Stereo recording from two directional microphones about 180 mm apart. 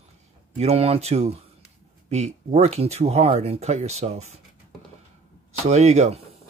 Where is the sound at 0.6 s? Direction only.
35° right (ahead or behind).